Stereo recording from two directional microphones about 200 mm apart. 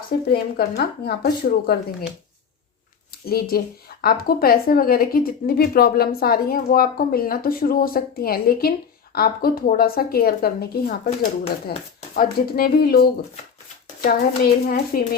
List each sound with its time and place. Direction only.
0.1 s a woman's voice: 50° left (ahead or behind)
3.2 s a woman's voice: 50° left (ahead or behind)